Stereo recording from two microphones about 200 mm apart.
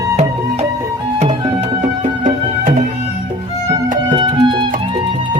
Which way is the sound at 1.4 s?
35° right (ahead or behind).